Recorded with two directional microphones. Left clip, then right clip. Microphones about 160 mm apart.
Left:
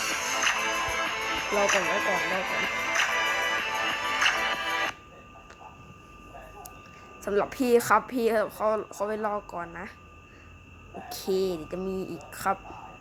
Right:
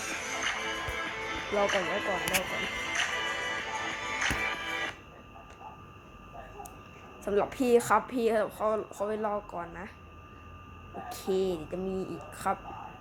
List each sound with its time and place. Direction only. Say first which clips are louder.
0.0 s music: left 6 dB; 65° left (ahead or behind)
7.3 s a woman's voice: left 2 dB; 35° left (ahead or behind)
11.1 s a woman's voice: left 2 dB; 35° left (ahead or behind)